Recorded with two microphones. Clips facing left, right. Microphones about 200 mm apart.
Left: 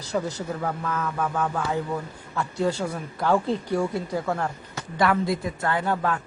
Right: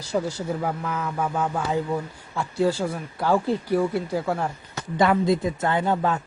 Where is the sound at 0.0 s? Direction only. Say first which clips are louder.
Right 2 dB; 10° right (ahead or behind).